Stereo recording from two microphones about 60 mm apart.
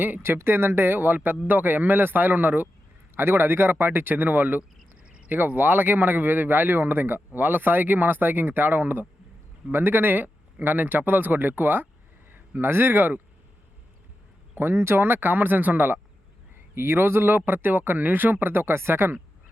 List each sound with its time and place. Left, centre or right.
0.0 s speech: right
14.5 s speech: right